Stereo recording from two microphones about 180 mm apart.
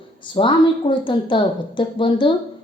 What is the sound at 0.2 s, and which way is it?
A woman's voice, 25° left (ahead or behind).